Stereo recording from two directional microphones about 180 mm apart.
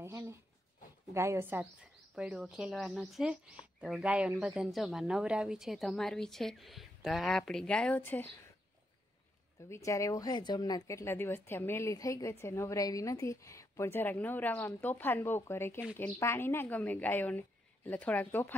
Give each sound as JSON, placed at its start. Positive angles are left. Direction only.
{"t": 0.0, "sound": "a sound", "side_deg": -15}
{"t": 1.1, "sound": "speech", "side_deg": -15}
{"t": 9.7, "sound": "speech", "side_deg": 15}